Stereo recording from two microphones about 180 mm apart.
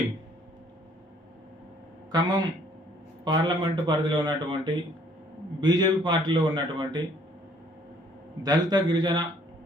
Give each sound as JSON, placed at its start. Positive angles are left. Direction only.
{"t": 2.1, "sound": "speech", "side_deg": -20}
{"t": 8.4, "sound": "speech", "side_deg": -20}